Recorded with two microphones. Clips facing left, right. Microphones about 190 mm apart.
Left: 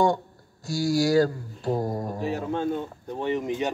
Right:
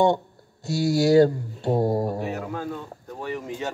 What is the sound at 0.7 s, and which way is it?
Speech, 25° right (ahead or behind).